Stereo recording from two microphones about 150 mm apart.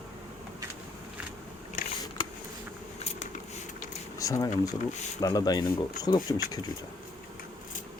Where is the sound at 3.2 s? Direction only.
50° left (ahead or behind).